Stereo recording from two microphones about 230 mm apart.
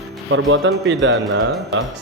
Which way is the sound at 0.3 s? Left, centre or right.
Right.